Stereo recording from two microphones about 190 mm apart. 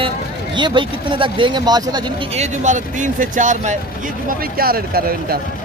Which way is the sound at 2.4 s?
40° right (ahead or behind).